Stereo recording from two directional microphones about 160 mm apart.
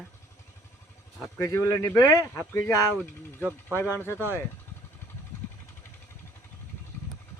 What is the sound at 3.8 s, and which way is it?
Speech, 15° left (ahead or behind).